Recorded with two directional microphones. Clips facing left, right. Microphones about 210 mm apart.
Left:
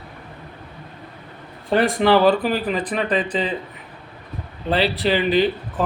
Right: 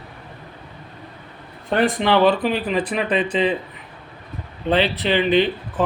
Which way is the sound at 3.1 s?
35° left (ahead or behind).